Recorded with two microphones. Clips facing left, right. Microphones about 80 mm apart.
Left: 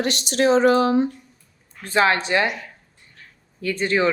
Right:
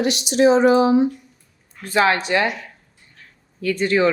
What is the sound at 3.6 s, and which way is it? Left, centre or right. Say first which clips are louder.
Speech: right 3 dB; left.